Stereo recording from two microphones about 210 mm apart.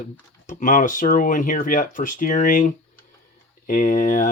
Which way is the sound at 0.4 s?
40° left (ahead or behind).